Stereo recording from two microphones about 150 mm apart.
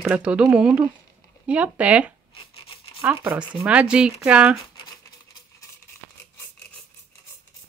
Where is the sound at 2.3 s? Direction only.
40° left (ahead or behind).